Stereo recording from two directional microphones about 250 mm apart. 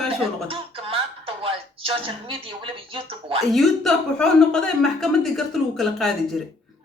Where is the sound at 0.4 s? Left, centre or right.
Right.